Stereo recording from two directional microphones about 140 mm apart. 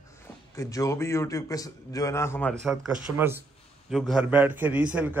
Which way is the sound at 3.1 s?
Centre (ahead or behind).